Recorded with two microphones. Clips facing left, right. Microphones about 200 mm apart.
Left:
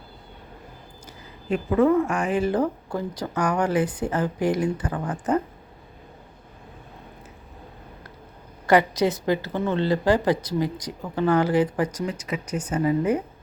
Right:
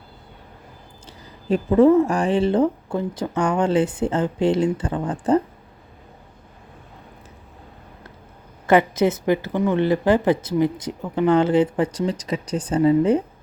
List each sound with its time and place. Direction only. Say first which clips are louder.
1.0 s speech: right 6 dB; 35° right (ahead or behind)
8.6 s speech: right 2 dB; 20° right (ahead or behind)